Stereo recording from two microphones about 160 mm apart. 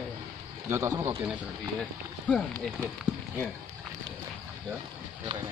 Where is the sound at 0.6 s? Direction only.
15° right (ahead or behind).